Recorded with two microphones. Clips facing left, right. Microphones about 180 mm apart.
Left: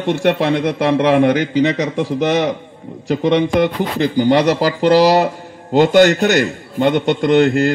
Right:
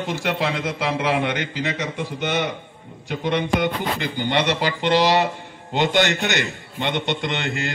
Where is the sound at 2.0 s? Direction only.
90° left.